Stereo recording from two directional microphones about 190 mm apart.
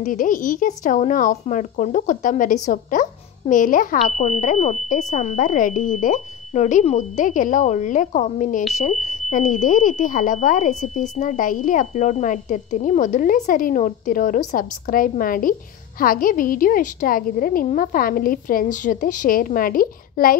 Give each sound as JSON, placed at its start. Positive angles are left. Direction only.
{"t": 0.0, "sound": "speech", "side_deg": 45}